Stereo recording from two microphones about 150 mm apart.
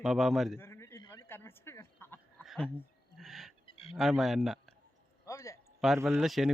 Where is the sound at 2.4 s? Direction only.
Centre (ahead or behind).